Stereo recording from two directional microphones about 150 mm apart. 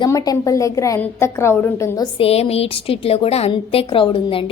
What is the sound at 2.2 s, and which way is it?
A woman's voice, 40° left (ahead or behind).